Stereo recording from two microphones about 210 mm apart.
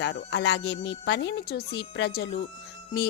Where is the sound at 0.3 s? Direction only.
55° left (ahead or behind).